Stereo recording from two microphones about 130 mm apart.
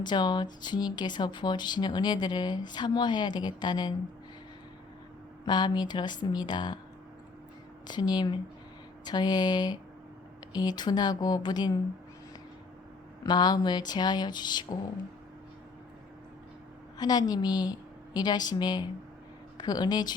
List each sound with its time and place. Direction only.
0.0 s speech: 35° left (ahead or behind)
5.5 s speech: 35° left (ahead or behind)
7.9 s speech: 35° left (ahead or behind)
13.2 s speech: 30° left (ahead or behind)
17.0 s speech: 30° left (ahead or behind)